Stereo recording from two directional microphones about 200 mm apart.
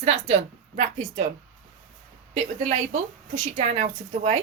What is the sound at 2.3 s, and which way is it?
Speech, 35° right (ahead or behind).